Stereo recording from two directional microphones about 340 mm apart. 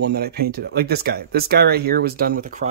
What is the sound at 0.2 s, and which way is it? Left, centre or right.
Speech, right.